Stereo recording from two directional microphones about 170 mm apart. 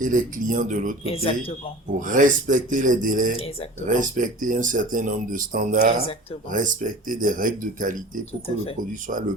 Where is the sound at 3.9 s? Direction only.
50° right (ahead or behind).